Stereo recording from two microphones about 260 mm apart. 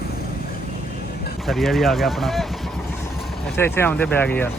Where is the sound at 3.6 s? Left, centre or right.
Centre.